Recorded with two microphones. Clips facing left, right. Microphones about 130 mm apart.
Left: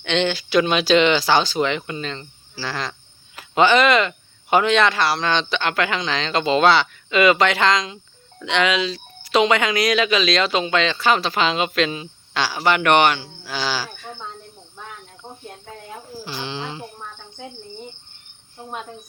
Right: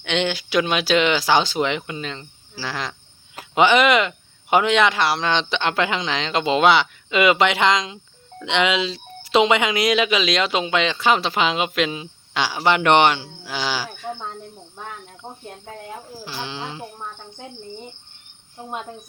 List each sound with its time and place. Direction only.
0.0 s speech: 10° right (ahead or behind)
16.2 s speech: 5° right (ahead or behind)